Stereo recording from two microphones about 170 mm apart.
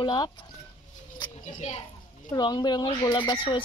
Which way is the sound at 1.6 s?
40° left (ahead or behind).